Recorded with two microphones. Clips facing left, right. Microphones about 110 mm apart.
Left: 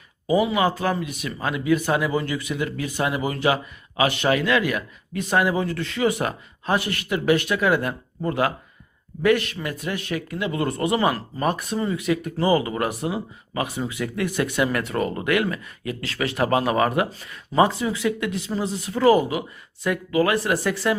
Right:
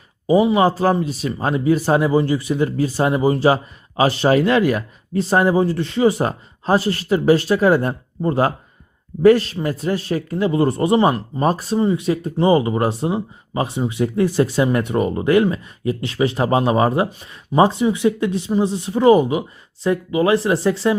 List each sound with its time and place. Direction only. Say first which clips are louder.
0.3 s speech: right 6 dB; 30° right (ahead or behind)